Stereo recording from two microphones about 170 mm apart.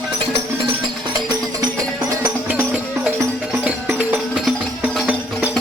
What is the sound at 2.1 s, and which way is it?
Music, 15° right (ahead or behind).